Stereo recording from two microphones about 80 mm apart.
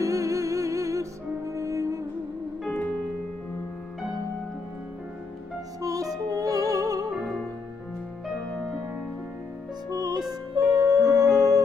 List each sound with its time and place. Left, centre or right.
0.0 s music: right
5.8 s music: right
7.1 s music: centre
9.8 s music: right